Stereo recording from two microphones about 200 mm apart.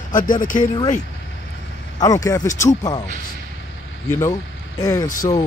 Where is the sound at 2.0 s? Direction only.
15° left (ahead or behind).